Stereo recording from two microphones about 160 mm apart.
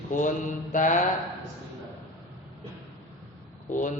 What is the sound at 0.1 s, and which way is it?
Speech, 50° left (ahead or behind).